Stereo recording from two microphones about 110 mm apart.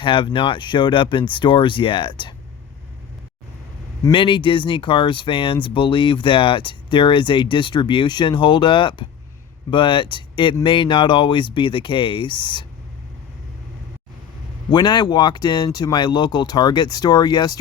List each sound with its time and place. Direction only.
0.0 s speech: 50° left (ahead or behind)
4.1 s speech: 50° left (ahead or behind)
14.7 s speech: 40° left (ahead or behind)